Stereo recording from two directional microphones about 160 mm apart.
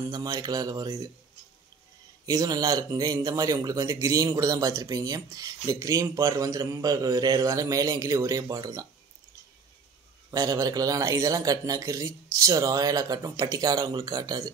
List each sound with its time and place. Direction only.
0.1 s speech: 25° right (ahead or behind)
2.2 s speech: 20° right (ahead or behind)
10.3 s speech: 25° right (ahead or behind)